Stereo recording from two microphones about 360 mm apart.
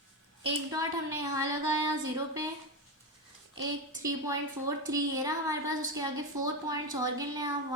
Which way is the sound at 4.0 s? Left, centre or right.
Centre.